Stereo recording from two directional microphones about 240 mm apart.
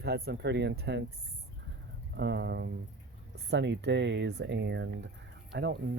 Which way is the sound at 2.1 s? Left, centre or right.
Right.